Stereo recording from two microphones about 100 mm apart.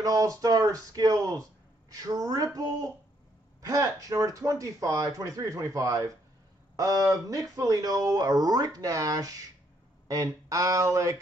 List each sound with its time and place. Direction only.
0.0 s speech: 35° right (ahead or behind)